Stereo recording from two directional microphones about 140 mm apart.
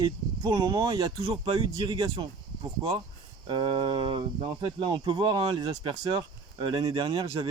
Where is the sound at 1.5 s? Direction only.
30° right (ahead or behind).